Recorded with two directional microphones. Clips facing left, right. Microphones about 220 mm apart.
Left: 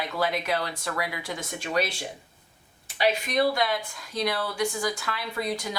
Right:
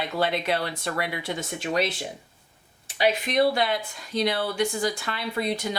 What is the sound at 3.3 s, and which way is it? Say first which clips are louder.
Speech: right 2 dB; 25° right (ahead or behind).